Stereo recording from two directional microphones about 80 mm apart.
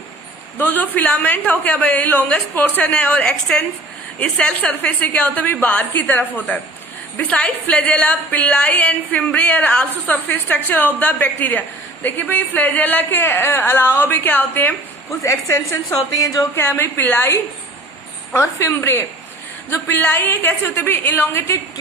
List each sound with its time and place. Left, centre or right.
0.6 s a woman's voice: left
15.2 s a woman's voice: left
16.6 s a woman's voice: left